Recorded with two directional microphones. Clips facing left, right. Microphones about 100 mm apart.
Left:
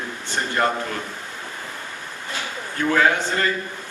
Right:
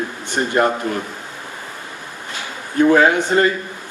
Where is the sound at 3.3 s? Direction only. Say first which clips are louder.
Right 8 dB; 30° right (ahead or behind).